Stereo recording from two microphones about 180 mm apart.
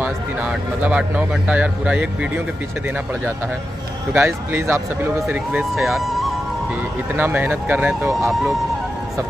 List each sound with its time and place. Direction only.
0.0 s speech: 10° right (ahead or behind)
4.1 s speech: 10° right (ahead or behind)
7.2 s speech: 10° right (ahead or behind)